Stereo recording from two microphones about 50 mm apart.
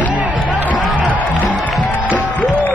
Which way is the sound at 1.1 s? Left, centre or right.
Left.